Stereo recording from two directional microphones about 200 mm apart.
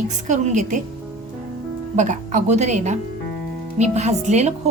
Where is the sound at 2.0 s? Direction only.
40° right (ahead or behind).